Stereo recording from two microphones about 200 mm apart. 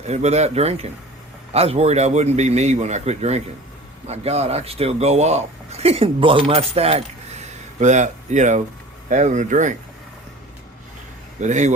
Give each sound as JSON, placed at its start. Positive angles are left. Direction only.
{"t": 0.1, "sound": "speech", "side_deg": -35}
{"t": 11.3, "sound": "speech", "side_deg": -35}